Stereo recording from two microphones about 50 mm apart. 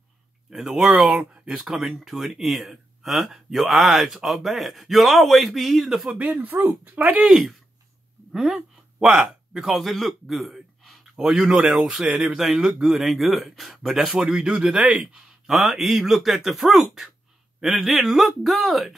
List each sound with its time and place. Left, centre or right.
0.5 s speech: centre
6.0 s speech: right
6.4 s speech: right
7.2 s a man's voice: centre
15.5 s speech: centre